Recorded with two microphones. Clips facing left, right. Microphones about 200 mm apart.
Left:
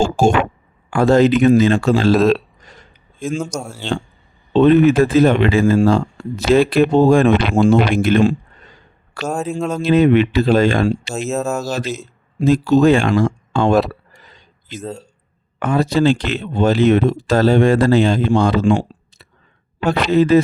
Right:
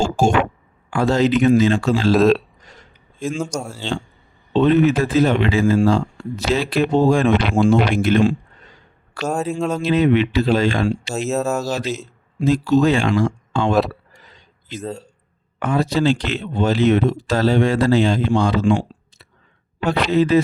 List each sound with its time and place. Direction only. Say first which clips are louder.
0.0 s speech: left 2 dB; 55° left (ahead or behind)
2.1 s speech: even; centre (ahead or behind)
4.5 s speech: left 4 dB; 55° left (ahead or behind)
9.2 s speech: even; centre (ahead or behind)
9.8 s speech: left 4 dB; 50° left (ahead or behind)
11.1 s speech: even; centre (ahead or behind)
11.9 s speech: left 3 dB; 50° left (ahead or behind)
14.8 s speech: even; centre (ahead or behind)
15.5 s speech: left 3 dB; 55° left (ahead or behind)
19.8 s speech: left 3 dB; 50° left (ahead or behind)